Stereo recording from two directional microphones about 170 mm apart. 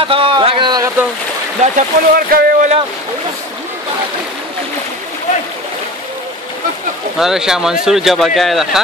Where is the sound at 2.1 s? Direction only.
60° right (ahead or behind).